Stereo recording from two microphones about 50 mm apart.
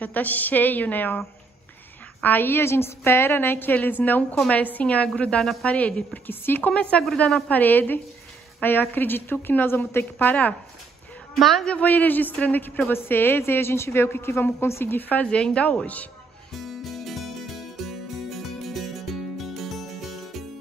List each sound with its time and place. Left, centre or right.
0.0 s a woman's voice: left
2.2 s a woman's voice: left
5.4 s a woman's voice: centre
5.7 s a woman's voice: left
6.2 s a woman's voice: left
6.7 s a woman's voice: left
7.4 s a woman's voice: left
10.1 s a woman's voice: left
11.3 s a woman's voice: centre
11.8 s a woman's voice: left
15.2 s a woman's voice: left
16.5 s music: centre